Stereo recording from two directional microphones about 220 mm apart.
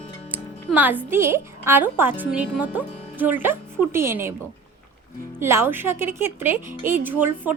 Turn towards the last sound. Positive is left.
turn(degrees=-10)  # may be behind; listen again after turning